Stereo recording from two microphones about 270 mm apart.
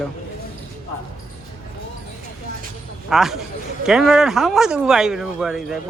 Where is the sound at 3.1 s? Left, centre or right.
Centre.